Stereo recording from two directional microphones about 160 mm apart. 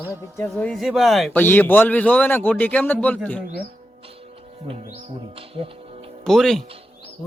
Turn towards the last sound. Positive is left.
turn(degrees=0)  # may be behind; listen again after turning